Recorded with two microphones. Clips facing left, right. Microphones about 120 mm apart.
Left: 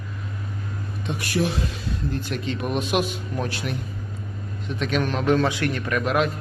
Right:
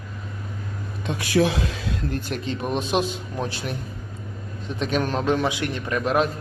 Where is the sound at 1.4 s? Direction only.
90° right.